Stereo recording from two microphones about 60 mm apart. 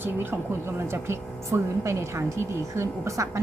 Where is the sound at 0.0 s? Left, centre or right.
Right.